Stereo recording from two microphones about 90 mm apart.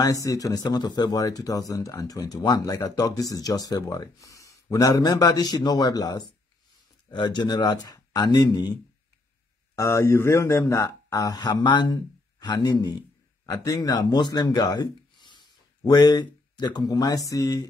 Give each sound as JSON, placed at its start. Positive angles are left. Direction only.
{"t": 0.0, "sound": "speech", "side_deg": 40}
{"t": 7.1, "sound": "speech", "side_deg": 55}
{"t": 9.8, "sound": "speech", "side_deg": 35}
{"t": 11.3, "sound": "speech", "side_deg": 55}